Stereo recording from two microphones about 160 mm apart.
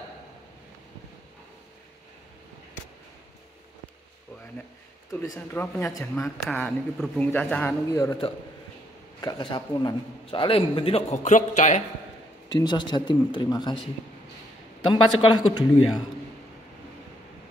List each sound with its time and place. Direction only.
5.1 s speech: 15° left (ahead or behind)
6.4 s speech: 5° left (ahead or behind)
7.9 s a man's voice: 20° left (ahead or behind); by 11.8 s 50° left (ahead or behind)
12.4 s speech: 25° left (ahead or behind)
14.9 s speech: 30° left (ahead or behind)